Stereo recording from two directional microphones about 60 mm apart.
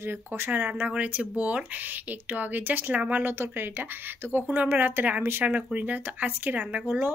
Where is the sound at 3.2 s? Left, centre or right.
Right.